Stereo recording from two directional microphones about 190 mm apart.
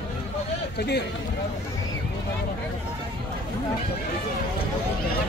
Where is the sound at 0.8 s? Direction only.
60° left (ahead or behind).